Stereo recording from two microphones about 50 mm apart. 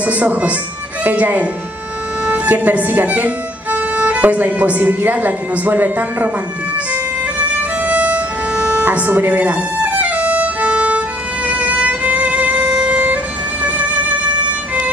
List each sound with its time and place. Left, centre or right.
0.0 s speech: right
6.9 s music: right
8.8 s violin: right